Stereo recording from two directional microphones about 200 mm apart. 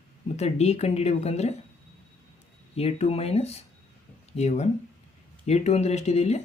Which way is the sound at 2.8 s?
30° left (ahead or behind).